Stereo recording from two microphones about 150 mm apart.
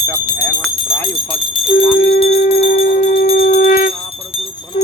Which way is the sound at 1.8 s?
40° left (ahead or behind).